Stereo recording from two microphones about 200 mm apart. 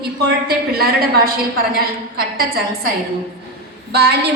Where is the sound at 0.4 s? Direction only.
50° right (ahead or behind).